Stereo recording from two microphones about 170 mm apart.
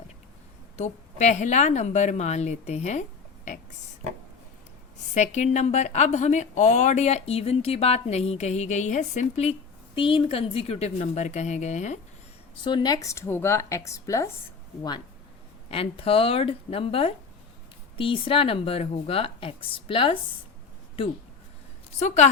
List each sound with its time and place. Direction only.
0.8 s a woman's voice: 45° left (ahead or behind)
5.1 s a woman's voice: 45° left (ahead or behind)
12.6 s speech: 25° left (ahead or behind)
15.7 s a woman's voice: 35° left (ahead or behind)
21.9 s a woman's voice: 40° left (ahead or behind)